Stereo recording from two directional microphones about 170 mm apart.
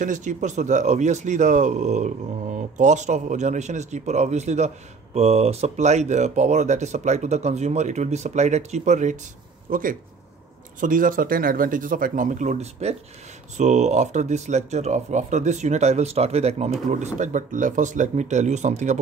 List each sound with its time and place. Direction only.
0.0 s a man's voice: 50° right (ahead or behind)